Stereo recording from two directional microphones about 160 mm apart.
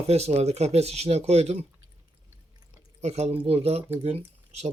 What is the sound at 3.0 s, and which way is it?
Speech, 45° right (ahead or behind).